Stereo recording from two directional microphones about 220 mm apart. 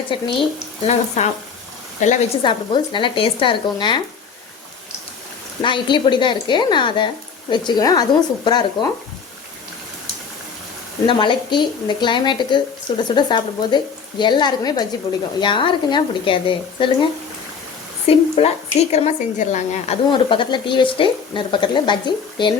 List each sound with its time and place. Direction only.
0.1 s a woman's voice: 25° left (ahead or behind)
2.4 s a woman's voice: 20° left (ahead or behind)
5.6 s a woman's voice: 20° left (ahead or behind)
11.0 s a woman's voice: 20° left (ahead or behind)
18.1 s a woman's voice: 25° left (ahead or behind)